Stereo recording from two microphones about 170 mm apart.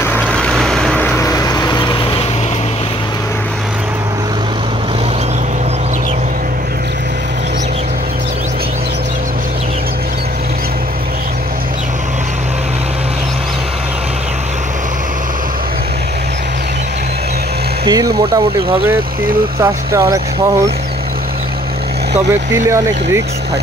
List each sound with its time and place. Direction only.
0.0 s vehicle: 10° left (ahead or behind); by 2.2 s 25° left (ahead or behind)
17.8 s a sound: 20° right (ahead or behind)
19.6 s speech: 15° right (ahead or behind)
22.5 s speech: 15° right (ahead or behind)